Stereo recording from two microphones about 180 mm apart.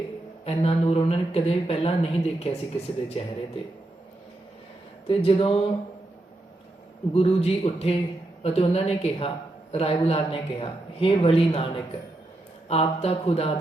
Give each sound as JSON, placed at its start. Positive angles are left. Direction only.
{"t": 0.4, "sound": "speech", "side_deg": 35}
{"t": 5.0, "sound": "speech", "side_deg": 30}
{"t": 7.1, "sound": "speech", "side_deg": 35}